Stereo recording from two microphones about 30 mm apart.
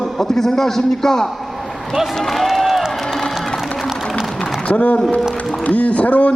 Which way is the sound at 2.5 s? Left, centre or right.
Centre.